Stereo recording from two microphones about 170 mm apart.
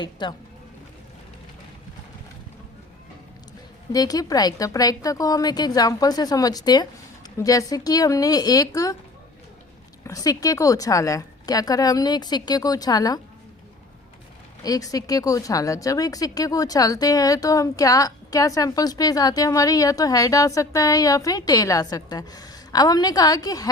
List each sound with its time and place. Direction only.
0.0 s a woman's voice: 25° left (ahead or behind)
3.9 s a woman's voice: 20° left (ahead or behind)
10.0 s a woman's voice: 20° left (ahead or behind)
14.6 s a woman's voice: 20° left (ahead or behind)